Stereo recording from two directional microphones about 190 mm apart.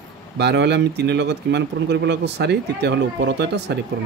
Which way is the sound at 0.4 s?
65° right (ahead or behind).